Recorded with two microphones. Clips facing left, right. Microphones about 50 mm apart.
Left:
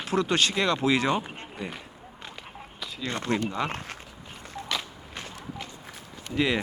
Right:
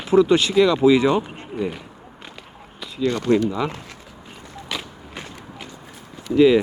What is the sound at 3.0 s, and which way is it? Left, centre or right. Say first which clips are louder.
Speech: right 10 dB; left.